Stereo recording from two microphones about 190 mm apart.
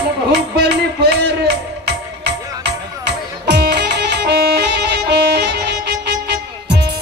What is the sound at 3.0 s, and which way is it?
Music, 60° right (ahead or behind).